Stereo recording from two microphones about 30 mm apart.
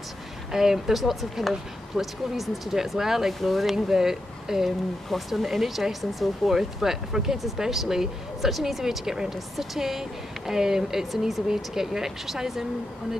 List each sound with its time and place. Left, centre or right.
0.5 s speech: centre
3.3 s speech: centre
3.7 s speech: centre
4.6 s speech: centre
8.8 s speech: centre
11.1 s speech: centre
11.4 s speech: centre